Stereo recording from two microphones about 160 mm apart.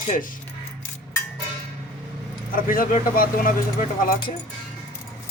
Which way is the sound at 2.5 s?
60° left (ahead or behind).